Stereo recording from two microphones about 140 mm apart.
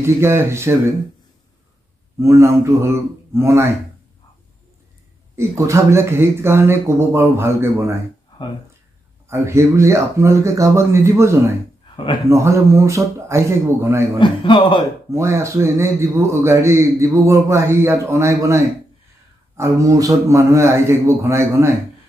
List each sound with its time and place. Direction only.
0.0 s a man's voice: 20° right (ahead or behind)
2.1 s a man's voice: 20° right (ahead or behind)
5.3 s a man's voice: 20° right (ahead or behind)
9.3 s a man's voice: 20° right (ahead or behind)
14.2 s a man's voice: 35° left (ahead or behind)
15.0 s a man's voice: 20° right (ahead or behind)